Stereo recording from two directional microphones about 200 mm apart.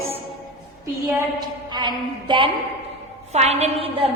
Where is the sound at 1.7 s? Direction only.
20° right (ahead or behind).